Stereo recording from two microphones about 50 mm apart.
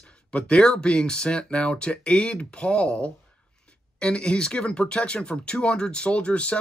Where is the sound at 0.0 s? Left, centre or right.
Left.